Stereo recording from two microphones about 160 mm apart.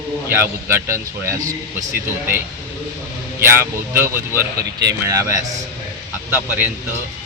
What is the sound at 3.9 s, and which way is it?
A man's voice, 15° right (ahead or behind).